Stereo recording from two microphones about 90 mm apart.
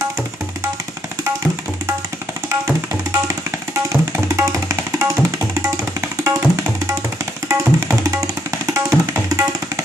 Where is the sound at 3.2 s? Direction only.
35° right (ahead or behind).